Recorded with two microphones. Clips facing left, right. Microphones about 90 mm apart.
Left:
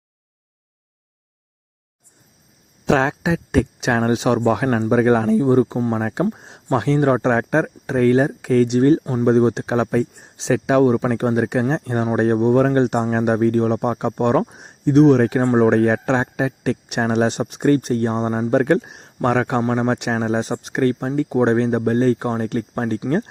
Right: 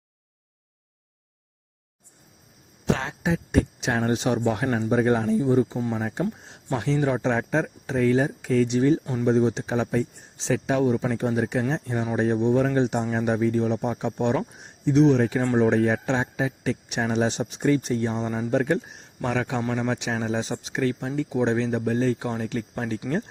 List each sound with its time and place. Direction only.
2.8 s speech: 90° left; by 19.6 s 55° left (ahead or behind)
19.6 s speech: 45° left (ahead or behind)